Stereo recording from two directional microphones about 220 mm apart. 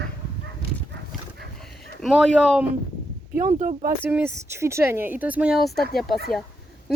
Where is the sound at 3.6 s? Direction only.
35° right (ahead or behind).